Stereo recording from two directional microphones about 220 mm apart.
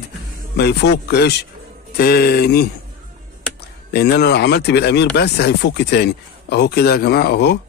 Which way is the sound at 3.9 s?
50° left (ahead or behind).